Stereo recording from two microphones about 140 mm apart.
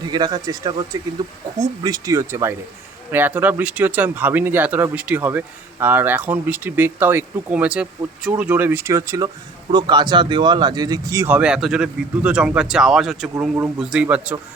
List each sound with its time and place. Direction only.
0.0 s speech: 30° right (ahead or behind)
11.3 s speech: 5° right (ahead or behind)